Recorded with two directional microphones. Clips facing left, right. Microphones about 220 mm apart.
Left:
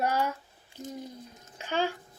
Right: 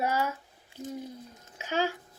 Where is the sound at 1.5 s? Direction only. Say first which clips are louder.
Even; 5° right (ahead or behind).